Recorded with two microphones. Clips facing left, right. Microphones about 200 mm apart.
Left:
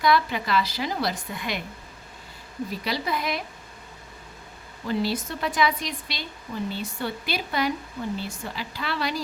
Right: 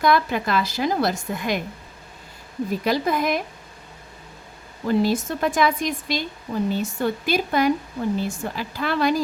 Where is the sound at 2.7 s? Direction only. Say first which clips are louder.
Right 7 dB; 50° right (ahead or behind).